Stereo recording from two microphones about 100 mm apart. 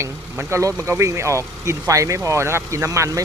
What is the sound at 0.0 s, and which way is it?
Speech, 25° right (ahead or behind).